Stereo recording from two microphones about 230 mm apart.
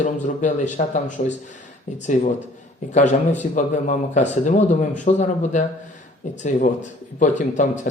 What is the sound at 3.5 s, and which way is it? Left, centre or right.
A man's voice, left.